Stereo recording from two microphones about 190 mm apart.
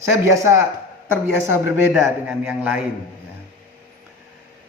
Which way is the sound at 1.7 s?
5° right (ahead or behind).